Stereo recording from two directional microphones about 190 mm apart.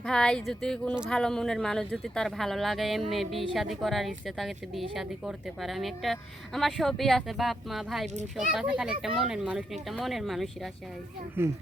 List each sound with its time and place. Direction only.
0.0 s a woman's voice: 5° left (ahead or behind)
8.0 s a child's voice: 35° right (ahead or behind)
8.4 s a woman's voice: 5° right (ahead or behind)
11.4 s speech: 10° right (ahead or behind)